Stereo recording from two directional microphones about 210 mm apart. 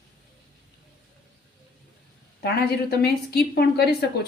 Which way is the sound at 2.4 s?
50° left (ahead or behind).